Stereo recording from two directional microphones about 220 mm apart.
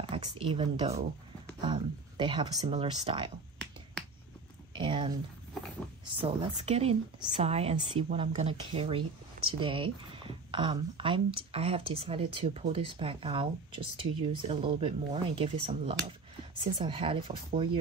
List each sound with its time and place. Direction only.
0.1 s speech: 20° right (ahead or behind)
4.7 s a sound: 25° right (ahead or behind)
6.0 s speech: 25° right (ahead or behind)